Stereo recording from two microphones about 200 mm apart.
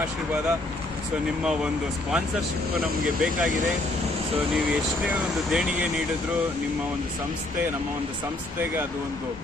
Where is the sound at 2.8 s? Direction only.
Centre (ahead or behind).